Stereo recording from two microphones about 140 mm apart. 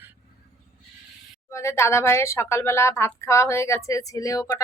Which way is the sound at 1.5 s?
20° left (ahead or behind).